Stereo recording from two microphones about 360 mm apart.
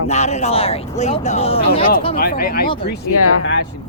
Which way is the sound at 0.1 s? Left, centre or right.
Centre.